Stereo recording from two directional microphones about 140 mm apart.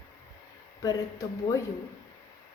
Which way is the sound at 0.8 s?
25° left (ahead or behind).